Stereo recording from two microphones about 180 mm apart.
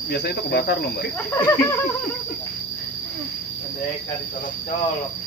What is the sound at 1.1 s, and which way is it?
Speech, 10° left (ahead or behind).